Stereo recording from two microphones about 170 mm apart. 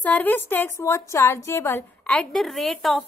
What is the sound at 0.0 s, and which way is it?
A woman's voice, 10° left (ahead or behind).